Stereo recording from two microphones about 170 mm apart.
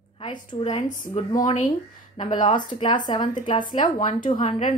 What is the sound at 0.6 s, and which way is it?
A woman's voice, 40° left (ahead or behind).